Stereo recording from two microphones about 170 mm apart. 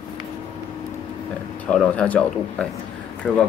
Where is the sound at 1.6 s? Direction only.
5° left (ahead or behind).